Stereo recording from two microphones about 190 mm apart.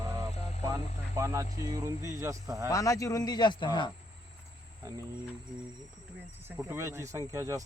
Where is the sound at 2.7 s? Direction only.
15° left (ahead or behind).